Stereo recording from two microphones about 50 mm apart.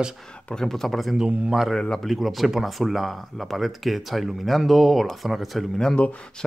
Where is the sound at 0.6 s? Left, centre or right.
Centre.